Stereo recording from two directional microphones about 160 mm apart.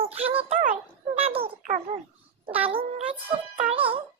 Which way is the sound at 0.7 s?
35° right (ahead or behind).